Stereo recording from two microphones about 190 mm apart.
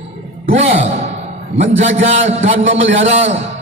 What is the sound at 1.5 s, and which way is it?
A man's voice, 35° right (ahead or behind).